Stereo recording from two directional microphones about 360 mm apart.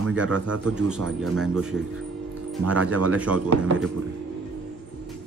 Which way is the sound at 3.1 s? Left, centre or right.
Centre.